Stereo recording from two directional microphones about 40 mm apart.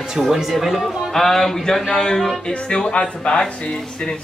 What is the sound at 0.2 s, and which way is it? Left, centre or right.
Speech, centre.